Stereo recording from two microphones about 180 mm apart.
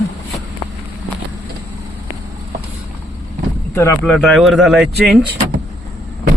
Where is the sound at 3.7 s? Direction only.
15° left (ahead or behind).